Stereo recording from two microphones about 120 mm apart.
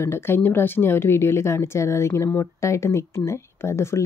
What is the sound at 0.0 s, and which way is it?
Speech, 20° left (ahead or behind).